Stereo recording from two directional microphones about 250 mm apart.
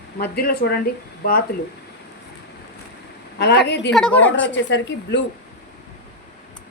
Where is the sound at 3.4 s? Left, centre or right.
Left.